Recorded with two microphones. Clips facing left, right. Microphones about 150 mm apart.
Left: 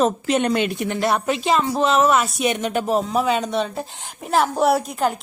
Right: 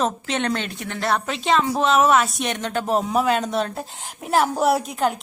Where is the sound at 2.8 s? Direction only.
Centre (ahead or behind).